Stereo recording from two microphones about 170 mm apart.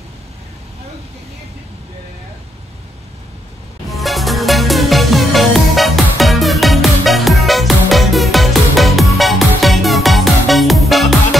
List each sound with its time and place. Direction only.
3.9 s music: centre (ahead or behind)